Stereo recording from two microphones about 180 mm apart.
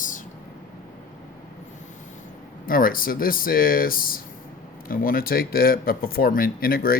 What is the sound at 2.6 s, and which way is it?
Speech, 50° left (ahead or behind).